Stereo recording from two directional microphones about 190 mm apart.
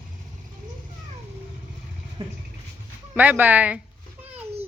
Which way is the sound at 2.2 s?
25° right (ahead or behind).